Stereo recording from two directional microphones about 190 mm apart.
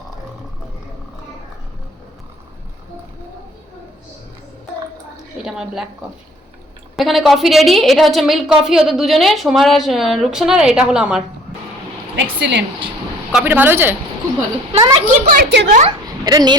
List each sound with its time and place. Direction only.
5.4 s a woman's voice: 5° right (ahead or behind)
6.9 s a woman's voice: centre (ahead or behind)
12.1 s speech: 70° right (ahead or behind)
13.3 s speech: 10° right (ahead or behind)
14.7 s a child's voice: 25° right (ahead or behind)
15.0 s speech: 40° right (ahead or behind)
15.4 s speech: 65° right (ahead or behind)
15.9 s a woman's voice: 20° right (ahead or behind)